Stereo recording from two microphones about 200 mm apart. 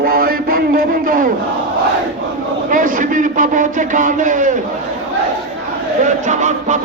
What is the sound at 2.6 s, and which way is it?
A man's voice, 40° right (ahead or behind).